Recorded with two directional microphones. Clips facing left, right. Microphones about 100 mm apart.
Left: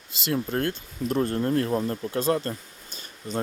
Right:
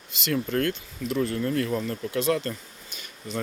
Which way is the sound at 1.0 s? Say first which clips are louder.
Left 2 dB; 45° left (ahead or behind).